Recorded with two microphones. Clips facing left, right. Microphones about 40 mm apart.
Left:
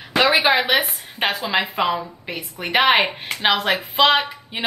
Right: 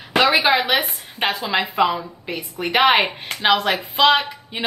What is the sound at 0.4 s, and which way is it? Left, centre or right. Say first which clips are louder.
A woman's voice: even; centre.